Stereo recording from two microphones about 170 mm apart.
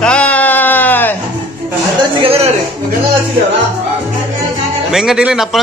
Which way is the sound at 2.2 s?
35° right (ahead or behind).